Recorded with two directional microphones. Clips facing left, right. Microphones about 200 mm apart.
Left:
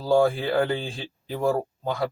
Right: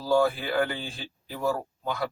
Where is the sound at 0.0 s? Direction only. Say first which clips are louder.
Left 3 dB; 25° left (ahead or behind).